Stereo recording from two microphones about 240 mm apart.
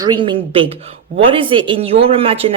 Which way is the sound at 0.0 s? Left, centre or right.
Centre.